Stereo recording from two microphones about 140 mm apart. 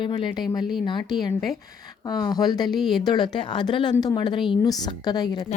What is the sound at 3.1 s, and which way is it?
A woman's voice, 30° left (ahead or behind).